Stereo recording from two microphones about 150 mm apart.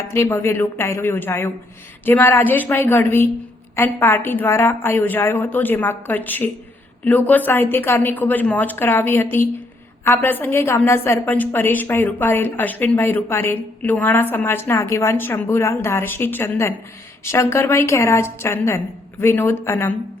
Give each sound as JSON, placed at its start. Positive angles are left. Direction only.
{"t": 0.1, "sound": "a woman's voice", "side_deg": 15}